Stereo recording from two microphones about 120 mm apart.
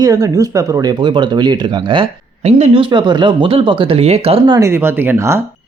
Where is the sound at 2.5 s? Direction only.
65° right (ahead or behind).